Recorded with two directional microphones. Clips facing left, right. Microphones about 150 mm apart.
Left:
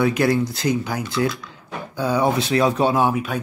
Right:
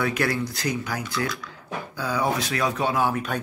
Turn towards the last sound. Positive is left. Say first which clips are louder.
# left 6 dB
turn(degrees=30)  # may be behind; listen again after turning